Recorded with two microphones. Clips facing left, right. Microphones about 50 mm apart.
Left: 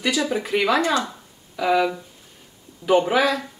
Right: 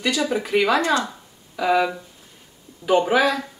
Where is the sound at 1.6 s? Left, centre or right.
Centre.